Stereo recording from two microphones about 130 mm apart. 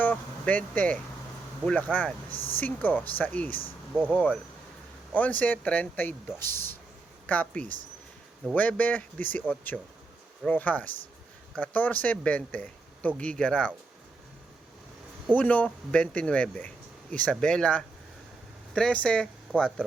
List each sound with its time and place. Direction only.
0.0 s speech: 10° left (ahead or behind)
9.7 s speech: 5° right (ahead or behind)
10.4 s speech: 10° left (ahead or behind)
15.4 s speech: 10° left (ahead or behind)